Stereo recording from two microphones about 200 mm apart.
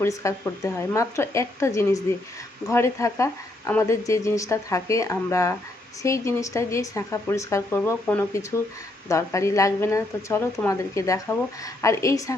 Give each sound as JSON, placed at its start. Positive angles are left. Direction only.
{"t": 0.0, "sound": "speech", "side_deg": 15}